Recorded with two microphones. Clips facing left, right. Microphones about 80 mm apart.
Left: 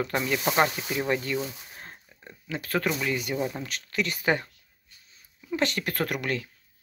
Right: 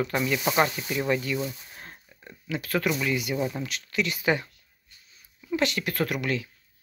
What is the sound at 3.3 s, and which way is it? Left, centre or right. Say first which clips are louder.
Speech: right 1 dB; centre.